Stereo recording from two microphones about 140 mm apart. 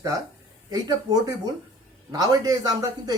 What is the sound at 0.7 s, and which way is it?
A man's voice, 25° right (ahead or behind).